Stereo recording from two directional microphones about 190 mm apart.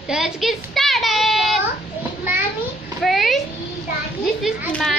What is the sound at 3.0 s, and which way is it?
Speech, centre (ahead or behind).